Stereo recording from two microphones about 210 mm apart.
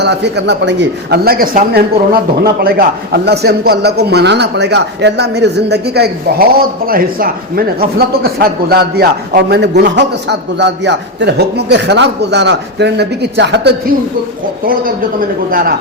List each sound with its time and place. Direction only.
0.0 s a man's voice: 55° right (ahead or behind)
15.4 s a man's voice: 45° right (ahead or behind)